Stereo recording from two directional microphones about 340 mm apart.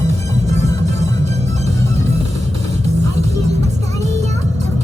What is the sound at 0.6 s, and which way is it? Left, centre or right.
Music, centre.